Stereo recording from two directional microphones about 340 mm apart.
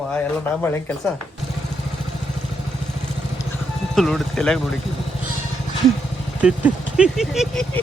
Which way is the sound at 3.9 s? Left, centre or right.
Centre.